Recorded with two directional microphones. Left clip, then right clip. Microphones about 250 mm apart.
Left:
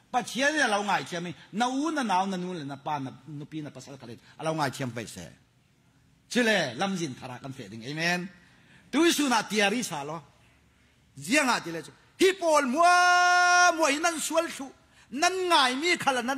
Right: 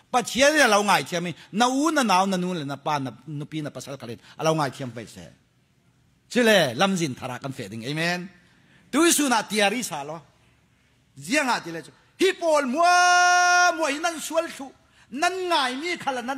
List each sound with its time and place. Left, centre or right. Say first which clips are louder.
0.1 s a man's voice: right 7 dB; right
4.6 s speech: right 1 dB; centre
6.5 s a man's voice: right 7 dB; right
15.4 s speech: left 1 dB; centre